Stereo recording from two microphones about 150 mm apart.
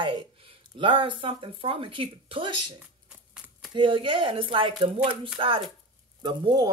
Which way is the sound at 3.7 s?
35° right (ahead or behind).